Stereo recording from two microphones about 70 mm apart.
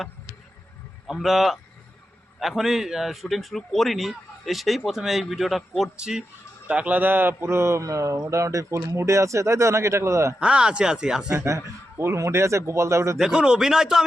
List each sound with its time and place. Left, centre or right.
1.0 s a man's voice: centre; by 10.3 s right
10.4 s speech: centre
11.3 s speech: right
13.1 s speech: centre